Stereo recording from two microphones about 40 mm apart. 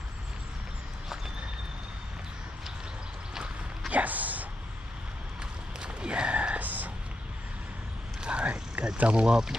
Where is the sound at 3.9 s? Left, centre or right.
Right.